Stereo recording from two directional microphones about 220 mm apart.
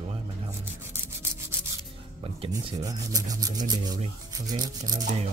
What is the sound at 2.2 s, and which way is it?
Speech, 25° right (ahead or behind).